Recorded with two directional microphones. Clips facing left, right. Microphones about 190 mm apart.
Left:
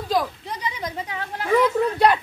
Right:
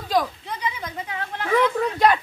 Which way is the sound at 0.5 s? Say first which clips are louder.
Even; 35° left (ahead or behind).